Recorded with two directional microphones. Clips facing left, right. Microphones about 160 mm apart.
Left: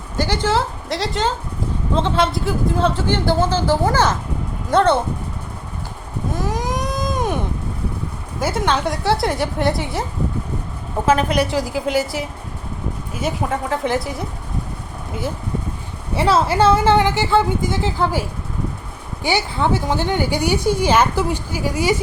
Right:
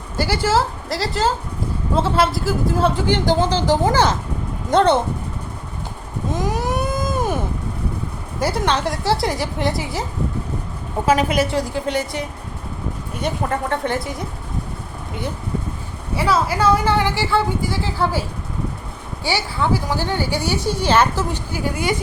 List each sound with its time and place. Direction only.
0.2 s a woman's voice: 5° right (ahead or behind)
6.3 s a sound: 10° right (ahead or behind)
8.4 s a woman's voice: centre (ahead or behind)
11.1 s a woman's voice: 10° right (ahead or behind)
16.1 s a woman's voice: 25° left (ahead or behind); by 21.9 s 10° left (ahead or behind)